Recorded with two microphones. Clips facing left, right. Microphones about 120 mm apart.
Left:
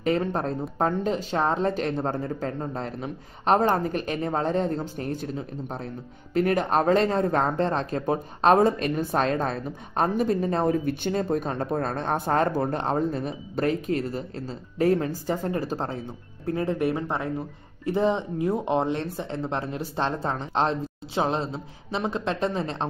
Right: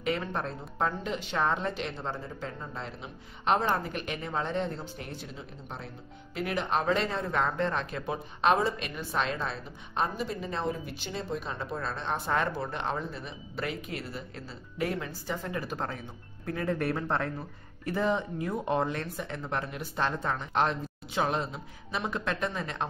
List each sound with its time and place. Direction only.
0.0 s speech: 40° left (ahead or behind)
16.7 s speech: 15° left (ahead or behind); by 22.8 s 30° left (ahead or behind)